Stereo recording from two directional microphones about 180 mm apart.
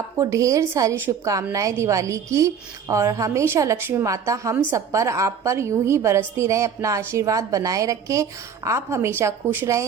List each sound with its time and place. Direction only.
0.2 s a woman's voice: 15° right (ahead or behind)